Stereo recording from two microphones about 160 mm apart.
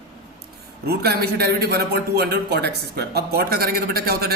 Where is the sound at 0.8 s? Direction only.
85° right.